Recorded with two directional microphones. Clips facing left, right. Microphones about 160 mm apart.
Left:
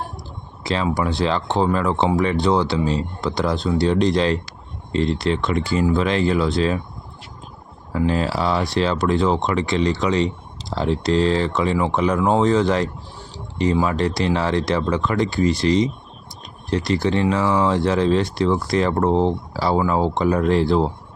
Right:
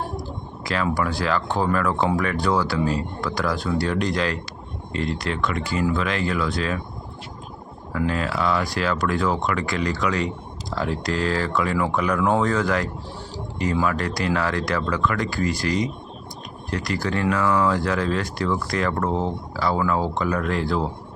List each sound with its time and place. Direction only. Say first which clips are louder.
0.6 s a sound: left 3 dB; 25° left (ahead or behind)
0.9 s speech: left 2 dB; 25° left (ahead or behind)
7.9 s speech: left 4 dB; 30° left (ahead or behind)